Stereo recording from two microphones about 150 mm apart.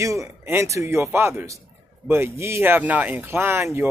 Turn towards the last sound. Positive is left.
turn(degrees=-15)  # may be behind; listen again after turning